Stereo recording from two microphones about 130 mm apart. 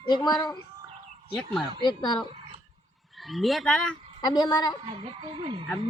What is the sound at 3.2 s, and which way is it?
Speech, centre (ahead or behind).